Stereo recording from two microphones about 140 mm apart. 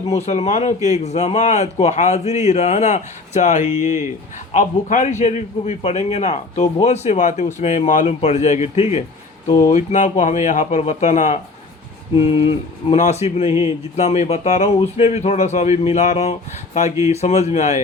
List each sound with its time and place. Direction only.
0.1 s a man's voice: 50° left (ahead or behind)
5.2 s a man's voice: 50° left (ahead or behind)
12.1 s speech: 40° left (ahead or behind)